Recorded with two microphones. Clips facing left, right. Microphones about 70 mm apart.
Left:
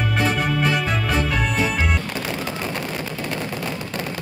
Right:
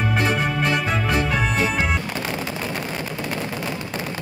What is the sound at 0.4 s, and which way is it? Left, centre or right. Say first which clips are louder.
Music: left 1 dB; centre.